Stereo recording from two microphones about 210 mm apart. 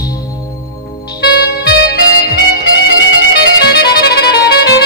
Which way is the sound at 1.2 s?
50° left (ahead or behind).